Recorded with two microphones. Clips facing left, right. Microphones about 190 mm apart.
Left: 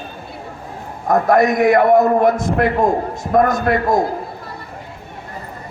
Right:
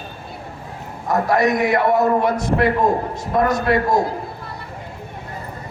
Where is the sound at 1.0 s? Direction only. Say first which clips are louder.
Left 4 dB; 50° left (ahead or behind).